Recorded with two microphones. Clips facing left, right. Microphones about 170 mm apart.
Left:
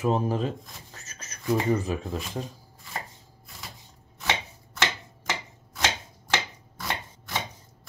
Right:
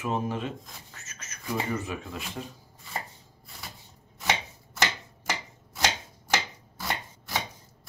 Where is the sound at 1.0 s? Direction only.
35° left (ahead or behind).